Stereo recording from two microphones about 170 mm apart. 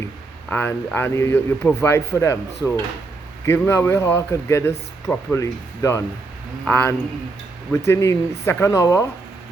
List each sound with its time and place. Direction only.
0.5 s a man's voice: 10° left (ahead or behind)